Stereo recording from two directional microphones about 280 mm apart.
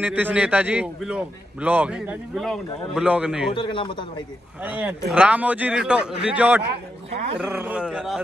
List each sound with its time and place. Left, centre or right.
0.0 s a man's voice: centre
3.5 s a man's voice: centre
4.6 s a man's voice: centre